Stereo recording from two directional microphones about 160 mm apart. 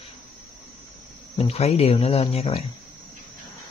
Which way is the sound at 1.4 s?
40° left (ahead or behind).